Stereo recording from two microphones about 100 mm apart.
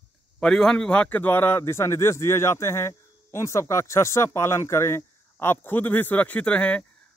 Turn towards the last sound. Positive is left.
turn(degrees=10)  # may be behind; listen again after turning